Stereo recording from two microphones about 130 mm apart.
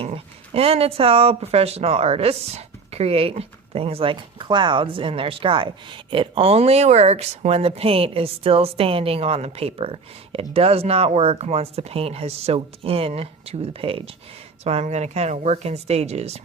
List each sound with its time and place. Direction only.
0.5 s speech: 50° right (ahead or behind)